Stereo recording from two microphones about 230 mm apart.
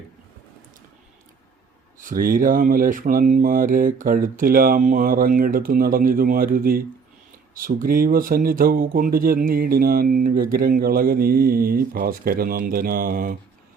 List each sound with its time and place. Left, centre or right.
2.0 s speech: right